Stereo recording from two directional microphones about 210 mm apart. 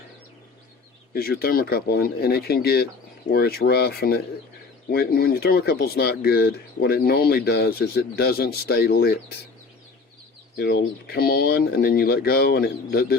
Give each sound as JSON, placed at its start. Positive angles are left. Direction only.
{"t": 1.1, "sound": "speech", "side_deg": 45}
{"t": 10.6, "sound": "speech", "side_deg": 45}